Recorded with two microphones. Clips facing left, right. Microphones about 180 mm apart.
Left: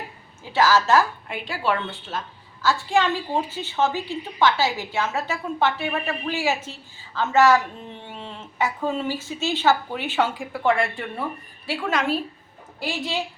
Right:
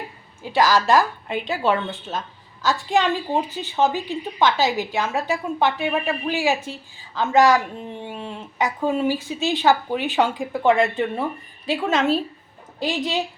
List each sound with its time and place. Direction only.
0.5 s speech: 15° right (ahead or behind)